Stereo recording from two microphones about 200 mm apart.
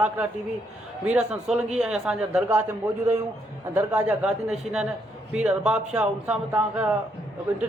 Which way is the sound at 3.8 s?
5° right (ahead or behind).